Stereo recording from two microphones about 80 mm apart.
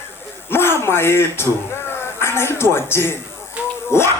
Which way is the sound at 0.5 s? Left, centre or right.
Left.